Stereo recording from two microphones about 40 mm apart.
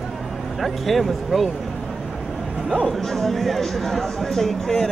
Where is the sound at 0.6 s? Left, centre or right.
Centre.